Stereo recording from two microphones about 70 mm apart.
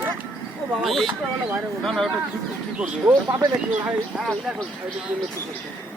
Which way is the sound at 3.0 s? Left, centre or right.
Right.